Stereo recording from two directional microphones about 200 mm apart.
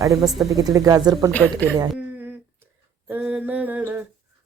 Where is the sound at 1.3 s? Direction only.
10° left (ahead or behind).